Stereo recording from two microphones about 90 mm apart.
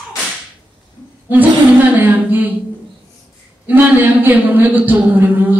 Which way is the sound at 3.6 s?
20° right (ahead or behind).